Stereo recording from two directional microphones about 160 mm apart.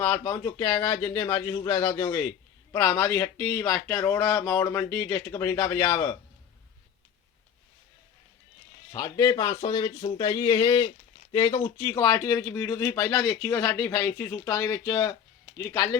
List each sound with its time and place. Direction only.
0.0 s speech: 20° left (ahead or behind)
8.9 s speech: 25° left (ahead or behind)